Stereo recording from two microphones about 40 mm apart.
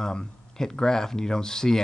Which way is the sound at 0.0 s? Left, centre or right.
Centre.